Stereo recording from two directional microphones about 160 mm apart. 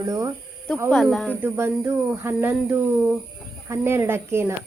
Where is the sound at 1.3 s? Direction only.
10° right (ahead or behind).